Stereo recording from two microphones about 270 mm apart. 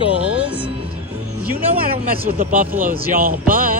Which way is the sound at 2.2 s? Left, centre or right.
Right.